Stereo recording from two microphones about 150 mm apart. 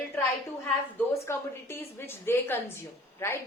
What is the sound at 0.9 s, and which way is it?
A woman's voice, 15° left (ahead or behind).